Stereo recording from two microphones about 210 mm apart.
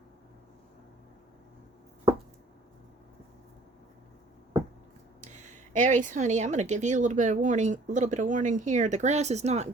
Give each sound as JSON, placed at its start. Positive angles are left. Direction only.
{"t": 5.2, "sound": "speech", "side_deg": -35}